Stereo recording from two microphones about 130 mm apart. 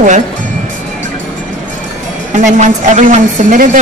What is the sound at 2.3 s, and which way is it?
A woman's voice, 75° right (ahead or behind).